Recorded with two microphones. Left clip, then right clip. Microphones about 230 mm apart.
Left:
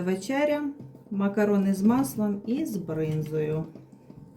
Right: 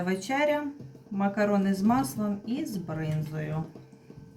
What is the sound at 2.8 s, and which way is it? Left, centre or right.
Speech, centre.